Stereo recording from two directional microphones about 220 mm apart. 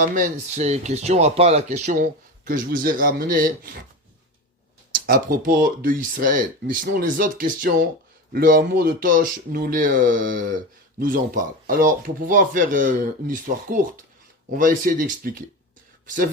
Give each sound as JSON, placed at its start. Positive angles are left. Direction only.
{"t": 0.0, "sound": "speech", "side_deg": -35}
{"t": 4.9, "sound": "speech", "side_deg": -40}